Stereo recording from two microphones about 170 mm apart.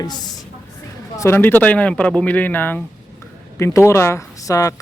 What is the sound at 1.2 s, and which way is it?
Speech, 15° left (ahead or behind).